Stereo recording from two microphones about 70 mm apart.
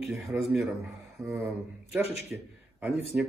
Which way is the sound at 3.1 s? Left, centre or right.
Centre.